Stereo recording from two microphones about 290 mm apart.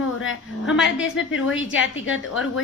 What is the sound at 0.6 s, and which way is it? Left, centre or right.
Speech, centre.